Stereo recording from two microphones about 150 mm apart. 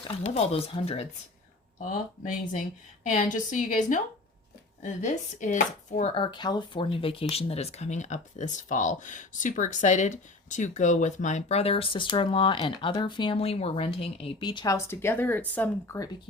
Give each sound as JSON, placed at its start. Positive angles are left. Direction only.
{"t": 0.2, "sound": "speech", "side_deg": 40}
{"t": 1.8, "sound": "a woman's voice", "side_deg": 60}
{"t": 6.1, "sound": "speech", "side_deg": 30}